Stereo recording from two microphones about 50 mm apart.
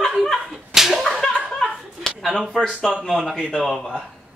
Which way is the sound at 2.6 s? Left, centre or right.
Centre.